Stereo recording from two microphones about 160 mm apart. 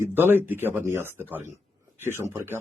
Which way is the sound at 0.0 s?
15° right (ahead or behind).